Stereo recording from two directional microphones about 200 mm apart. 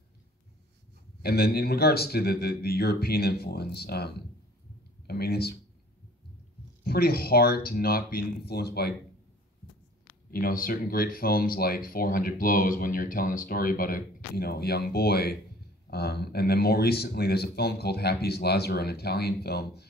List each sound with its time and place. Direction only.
1.2 s speech: 50° left (ahead or behind)
6.8 s speech: 50° left (ahead or behind)
10.3 s speech: 45° left (ahead or behind)